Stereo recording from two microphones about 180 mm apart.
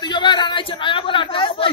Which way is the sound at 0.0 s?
25° left (ahead or behind).